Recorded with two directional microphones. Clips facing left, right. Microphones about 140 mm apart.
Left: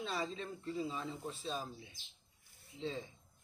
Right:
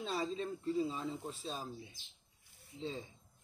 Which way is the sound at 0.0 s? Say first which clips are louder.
Right 2 dB; 35° right (ahead or behind).